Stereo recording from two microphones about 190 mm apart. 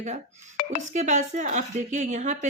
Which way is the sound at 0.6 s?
50° left (ahead or behind).